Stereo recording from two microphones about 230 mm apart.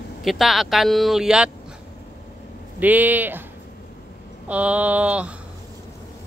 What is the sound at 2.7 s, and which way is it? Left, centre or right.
Speech, centre.